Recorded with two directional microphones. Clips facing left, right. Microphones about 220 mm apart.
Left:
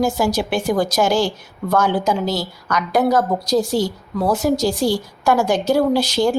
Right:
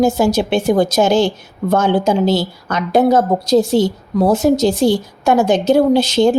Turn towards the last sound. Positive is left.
turn(degrees=-20)  # may be behind; listen again after turning